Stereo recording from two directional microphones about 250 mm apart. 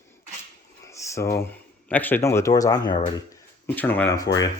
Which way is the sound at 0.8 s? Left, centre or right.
Centre.